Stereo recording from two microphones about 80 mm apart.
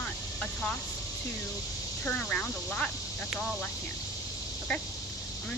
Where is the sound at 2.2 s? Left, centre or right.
Centre.